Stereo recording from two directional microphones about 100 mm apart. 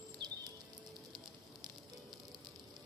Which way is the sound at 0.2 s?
55° right (ahead or behind).